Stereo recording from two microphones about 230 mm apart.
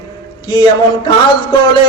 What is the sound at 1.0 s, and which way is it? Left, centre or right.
Speech, left.